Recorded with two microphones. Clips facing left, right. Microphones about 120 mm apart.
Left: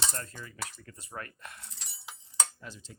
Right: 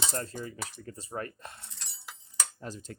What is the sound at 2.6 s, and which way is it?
Speech, 40° right (ahead or behind).